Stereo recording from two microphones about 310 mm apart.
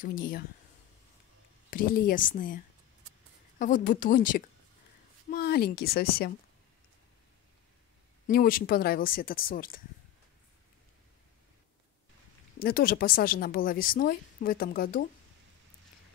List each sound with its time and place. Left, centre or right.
0.0 s a woman's voice: left
1.7 s a woman's voice: left
8.3 s a woman's voice: left
12.5 s a woman's voice: left